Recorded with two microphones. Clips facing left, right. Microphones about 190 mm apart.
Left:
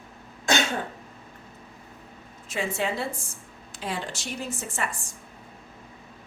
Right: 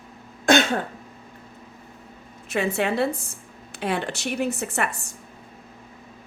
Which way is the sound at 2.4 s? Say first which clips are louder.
Right 5 dB; 65° right (ahead or behind).